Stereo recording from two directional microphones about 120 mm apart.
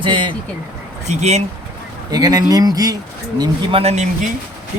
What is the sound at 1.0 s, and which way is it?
Speech, 70° right (ahead or behind).